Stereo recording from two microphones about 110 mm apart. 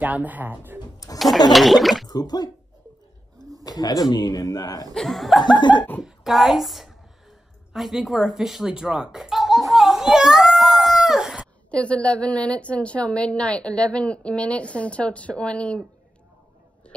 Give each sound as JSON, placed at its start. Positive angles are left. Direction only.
{"t": 0.0, "sound": "speech", "side_deg": -15}
{"t": 1.1, "sound": "speech", "side_deg": 0}
{"t": 2.0, "sound": "a man's voice", "side_deg": 35}
{"t": 3.6, "sound": "a man's voice", "side_deg": 35}
{"t": 4.9, "sound": "speech", "side_deg": 0}
{"t": 5.4, "sound": "a sound", "side_deg": 45}
{"t": 6.0, "sound": "a sound", "side_deg": 0}
{"t": 11.7, "sound": "a woman's voice", "side_deg": 10}